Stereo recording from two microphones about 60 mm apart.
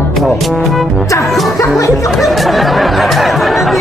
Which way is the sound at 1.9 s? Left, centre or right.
Centre.